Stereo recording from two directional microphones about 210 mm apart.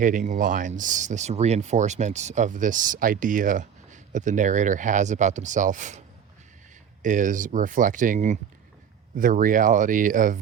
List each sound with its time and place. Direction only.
0.0 s speech: 40° right (ahead or behind)
7.0 s speech: 40° right (ahead or behind)